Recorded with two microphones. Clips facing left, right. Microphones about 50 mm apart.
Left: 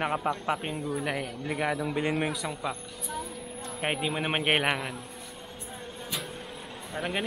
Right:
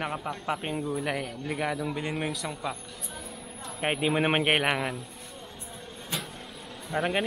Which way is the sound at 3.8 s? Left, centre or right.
Centre.